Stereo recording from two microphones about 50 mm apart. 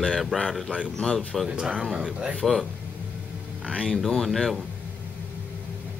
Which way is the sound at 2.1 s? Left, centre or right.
Right.